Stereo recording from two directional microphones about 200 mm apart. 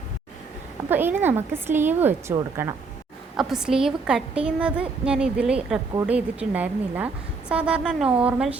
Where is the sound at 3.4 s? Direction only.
Centre (ahead or behind).